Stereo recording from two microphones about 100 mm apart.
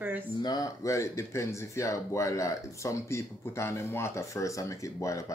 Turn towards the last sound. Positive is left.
turn(degrees=30)  # may be behind; listen again after turning